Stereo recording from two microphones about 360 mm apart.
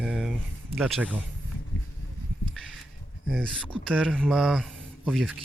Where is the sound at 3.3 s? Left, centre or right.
Centre.